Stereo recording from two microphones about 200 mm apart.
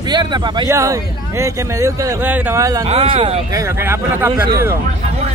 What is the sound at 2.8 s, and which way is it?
Speech, 30° right (ahead or behind).